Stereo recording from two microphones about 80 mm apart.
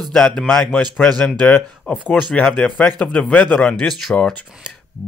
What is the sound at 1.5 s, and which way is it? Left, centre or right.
Speech, left.